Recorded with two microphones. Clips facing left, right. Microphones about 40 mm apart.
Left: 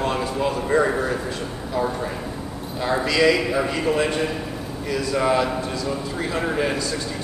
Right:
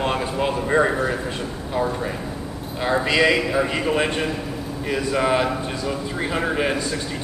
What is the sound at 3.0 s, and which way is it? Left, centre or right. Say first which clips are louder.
A man's voice: left 1 dB; right.